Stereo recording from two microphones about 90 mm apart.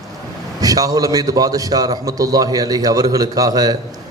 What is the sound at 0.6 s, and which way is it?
A man's voice, 45° right (ahead or behind).